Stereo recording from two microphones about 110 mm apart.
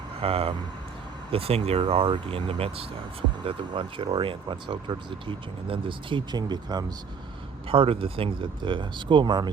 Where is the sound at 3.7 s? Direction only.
50° right (ahead or behind).